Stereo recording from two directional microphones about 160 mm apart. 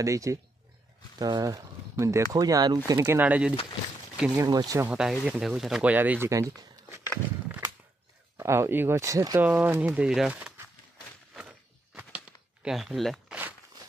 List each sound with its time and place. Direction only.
0.0 s speech: 20° right (ahead or behind)
2.9 s speech: 15° right (ahead or behind)
4.4 s speech: 25° right (ahead or behind)
4.9 s speech: 5° right (ahead or behind); by 7.1 s 20° right (ahead or behind)
8.4 s speech: 15° right (ahead or behind)
11.3 s walk: 5° right (ahead or behind)
12.6 s speech: centre (ahead or behind)